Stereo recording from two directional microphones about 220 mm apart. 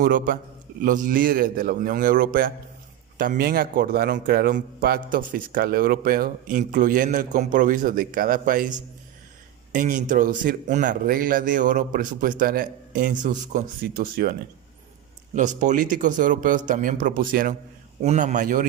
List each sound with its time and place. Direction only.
0.0 s a man's voice: 40° right (ahead or behind)
15.4 s a man's voice: 35° right (ahead or behind)